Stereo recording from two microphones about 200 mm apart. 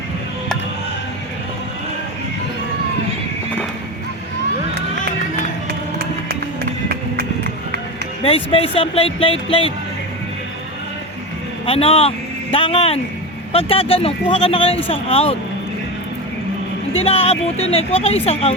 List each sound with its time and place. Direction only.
8.2 s speech: 30° left (ahead or behind)
11.6 s speech: 30° left (ahead or behind)
16.9 s speech: 30° left (ahead or behind)